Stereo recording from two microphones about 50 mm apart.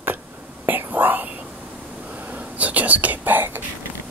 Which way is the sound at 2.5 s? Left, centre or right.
Right.